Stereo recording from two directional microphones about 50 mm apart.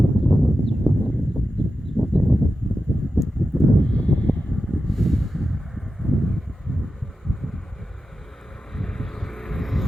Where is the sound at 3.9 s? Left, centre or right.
Left.